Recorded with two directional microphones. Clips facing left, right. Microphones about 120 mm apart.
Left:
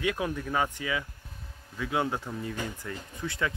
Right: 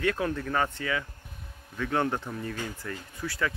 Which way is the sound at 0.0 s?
10° left (ahead or behind).